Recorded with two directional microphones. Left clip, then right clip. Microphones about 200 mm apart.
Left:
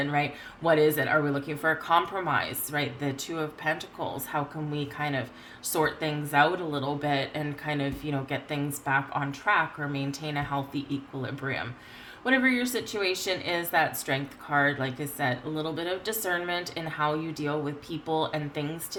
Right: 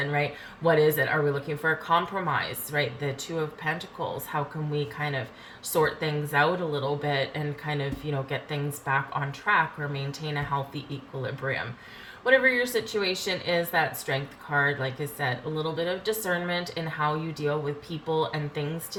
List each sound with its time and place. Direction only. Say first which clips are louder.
0.1 s a woman's voice: even; 50° left (ahead or behind)